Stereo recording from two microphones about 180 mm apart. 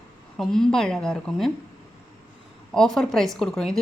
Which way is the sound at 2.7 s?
Centre (ahead or behind).